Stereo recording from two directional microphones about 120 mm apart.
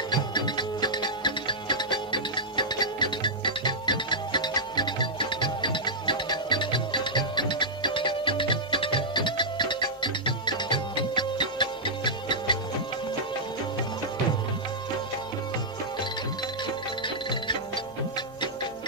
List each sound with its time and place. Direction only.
0.1 s music: 35° left (ahead or behind)
17.0 s music: 40° left (ahead or behind)